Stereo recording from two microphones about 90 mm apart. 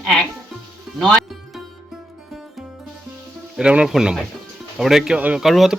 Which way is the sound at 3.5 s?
10° right (ahead or behind).